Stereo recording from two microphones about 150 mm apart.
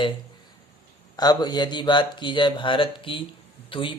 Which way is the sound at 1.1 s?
25° left (ahead or behind).